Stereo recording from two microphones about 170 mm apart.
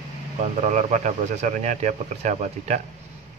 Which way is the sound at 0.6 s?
45° right (ahead or behind).